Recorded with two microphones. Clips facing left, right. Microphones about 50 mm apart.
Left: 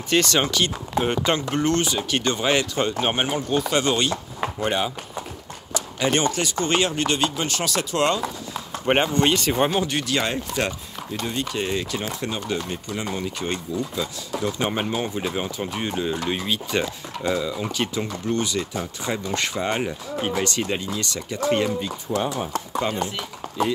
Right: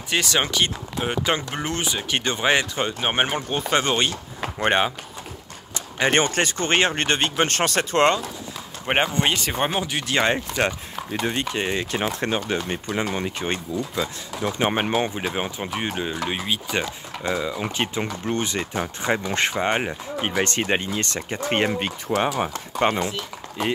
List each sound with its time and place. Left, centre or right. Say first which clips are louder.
0.1 s speech: left 2 dB; centre; by 4.1 s right
4.6 s speech: right 4 dB; right
5.9 s speech: right 2 dB; right
8.8 s speech: left 2 dB; centre
10.0 s speech: right 3 dB; right
12.0 s speech: right 4 dB; right
13.4 s speech: even; right
14.7 s speech: right 3 dB; right
15.3 s speech: even; right
21.7 s speech: right 2 dB; right